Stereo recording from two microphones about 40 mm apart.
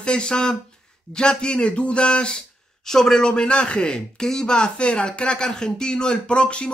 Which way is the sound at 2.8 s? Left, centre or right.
Centre.